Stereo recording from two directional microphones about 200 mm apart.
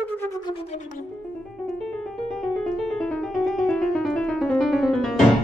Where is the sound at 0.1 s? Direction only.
10° left (ahead or behind).